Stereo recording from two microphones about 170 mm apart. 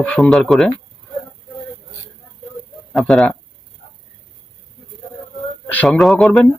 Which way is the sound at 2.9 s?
Centre (ahead or behind).